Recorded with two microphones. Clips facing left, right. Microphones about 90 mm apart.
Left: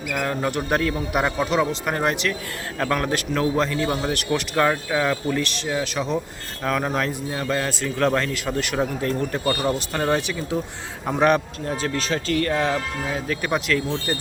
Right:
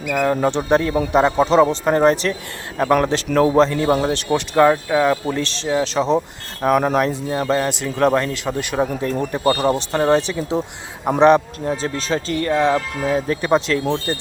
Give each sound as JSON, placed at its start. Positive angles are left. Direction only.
{"t": 0.1, "sound": "speech", "side_deg": -25}
{"t": 2.7, "sound": "speech", "side_deg": -25}
{"t": 13.1, "sound": "speech", "side_deg": -30}